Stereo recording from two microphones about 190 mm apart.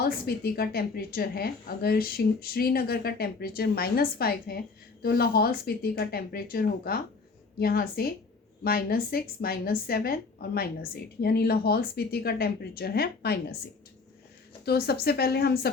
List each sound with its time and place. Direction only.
0.0 s a woman's voice: 55° left (ahead or behind)
14.6 s speech: 55° left (ahead or behind)